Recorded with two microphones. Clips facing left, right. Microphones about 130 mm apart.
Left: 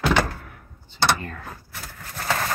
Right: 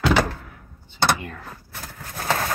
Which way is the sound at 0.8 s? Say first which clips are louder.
Right 1 dB; 50° right (ahead or behind).